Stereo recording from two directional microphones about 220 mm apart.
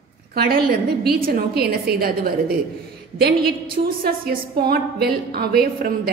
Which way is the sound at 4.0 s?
45° right (ahead or behind).